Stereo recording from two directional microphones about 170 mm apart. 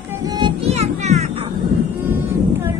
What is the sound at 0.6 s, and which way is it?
Music, 40° right (ahead or behind).